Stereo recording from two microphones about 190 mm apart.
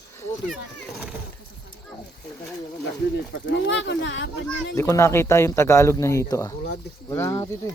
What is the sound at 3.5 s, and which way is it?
Speech, 75° left (ahead or behind).